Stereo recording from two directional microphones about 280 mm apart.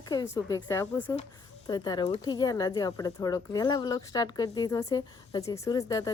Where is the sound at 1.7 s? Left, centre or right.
Centre.